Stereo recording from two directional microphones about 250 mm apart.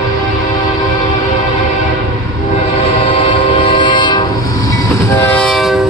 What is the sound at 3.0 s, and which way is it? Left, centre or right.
Train, centre.